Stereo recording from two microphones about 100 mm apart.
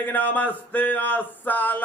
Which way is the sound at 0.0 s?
20° left (ahead or behind).